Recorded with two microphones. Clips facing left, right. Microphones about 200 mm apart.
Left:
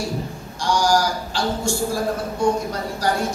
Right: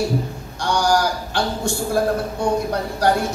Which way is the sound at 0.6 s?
60° right (ahead or behind).